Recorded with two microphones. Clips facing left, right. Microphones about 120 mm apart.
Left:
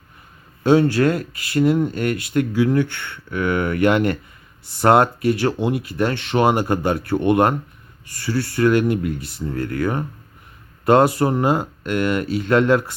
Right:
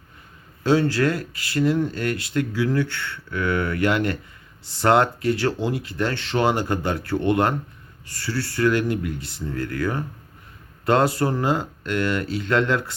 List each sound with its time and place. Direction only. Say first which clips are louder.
0.6 s speech: left 4 dB; 20° left (ahead or behind)
9.1 s speech: left 3 dB; 25° right (ahead or behind)
9.5 s speech: left 3 dB; 25° left (ahead or behind)